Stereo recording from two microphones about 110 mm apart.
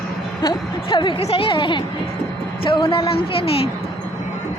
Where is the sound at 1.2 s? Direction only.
60° left (ahead or behind).